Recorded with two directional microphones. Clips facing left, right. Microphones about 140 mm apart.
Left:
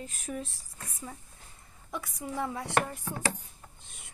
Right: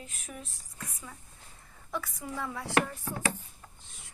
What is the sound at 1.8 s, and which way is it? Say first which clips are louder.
Speech: even; 20° left (ahead or behind).